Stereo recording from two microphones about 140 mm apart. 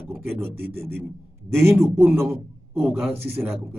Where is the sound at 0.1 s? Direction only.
15° right (ahead or behind).